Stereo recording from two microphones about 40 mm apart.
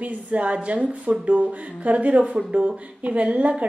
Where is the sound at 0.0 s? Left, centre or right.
Right.